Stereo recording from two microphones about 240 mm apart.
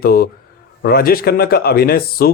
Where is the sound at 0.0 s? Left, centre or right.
Left.